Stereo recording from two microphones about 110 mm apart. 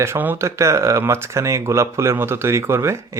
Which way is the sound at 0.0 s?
20° right (ahead or behind).